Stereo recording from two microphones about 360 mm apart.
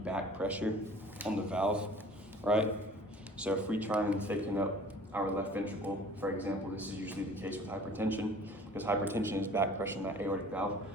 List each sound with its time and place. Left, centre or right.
0.0 s a man's voice: centre